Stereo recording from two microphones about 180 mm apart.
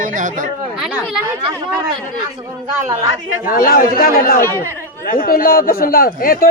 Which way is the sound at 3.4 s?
55° left (ahead or behind).